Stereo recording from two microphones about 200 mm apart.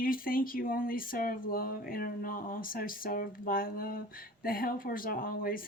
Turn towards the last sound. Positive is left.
turn(degrees=45)  # may be behind; listen again after turning